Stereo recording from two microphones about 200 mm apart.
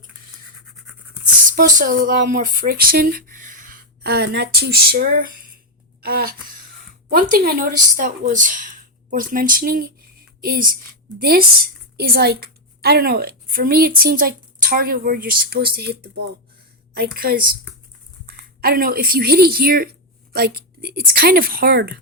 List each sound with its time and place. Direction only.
1.5 s a woman's voice: 45° right (ahead or behind)